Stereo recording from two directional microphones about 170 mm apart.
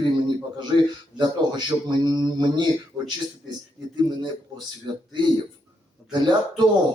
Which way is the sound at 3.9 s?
25° right (ahead or behind).